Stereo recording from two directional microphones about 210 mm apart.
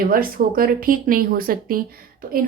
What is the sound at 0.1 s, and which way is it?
A woman's voice, 45° right (ahead or behind).